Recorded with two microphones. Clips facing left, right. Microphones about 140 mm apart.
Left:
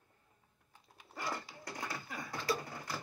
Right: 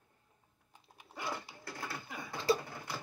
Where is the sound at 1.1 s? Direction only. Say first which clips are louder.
Even; centre (ahead or behind).